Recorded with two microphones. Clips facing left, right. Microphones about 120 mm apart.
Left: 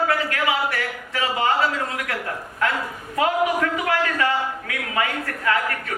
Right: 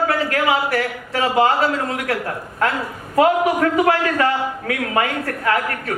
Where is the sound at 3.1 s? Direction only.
40° right (ahead or behind).